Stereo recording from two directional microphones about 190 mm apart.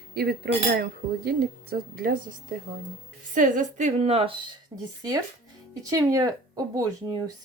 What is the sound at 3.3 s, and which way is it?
A woman's voice, 45° right (ahead or behind).